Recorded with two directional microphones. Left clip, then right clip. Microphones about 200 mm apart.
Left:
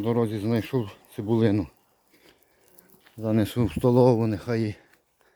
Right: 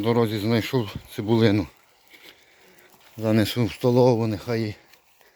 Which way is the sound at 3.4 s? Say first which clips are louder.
Right 1 dB; 15° left (ahead or behind).